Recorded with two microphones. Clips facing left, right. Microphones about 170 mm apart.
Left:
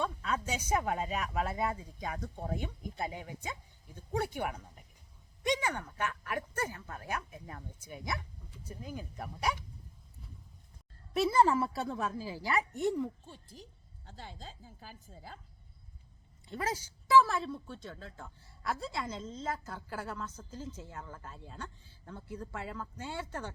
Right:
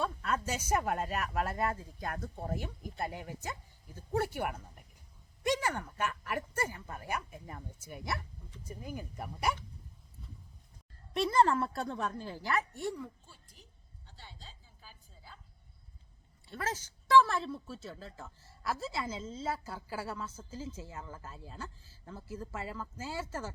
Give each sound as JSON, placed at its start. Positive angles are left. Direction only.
{"t": 0.0, "sound": "speech", "side_deg": 0}
{"t": 11.1, "sound": "a woman's voice", "side_deg": 5}
{"t": 13.2, "sound": "speech", "side_deg": 35}
{"t": 14.1, "sound": "a woman's voice", "side_deg": 45}
{"t": 16.5, "sound": "speech", "side_deg": 15}